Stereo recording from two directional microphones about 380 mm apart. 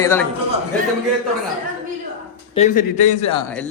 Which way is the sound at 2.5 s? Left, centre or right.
Centre.